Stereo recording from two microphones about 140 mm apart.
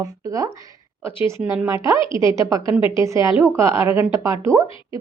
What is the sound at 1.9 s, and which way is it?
Speech, 40° left (ahead or behind).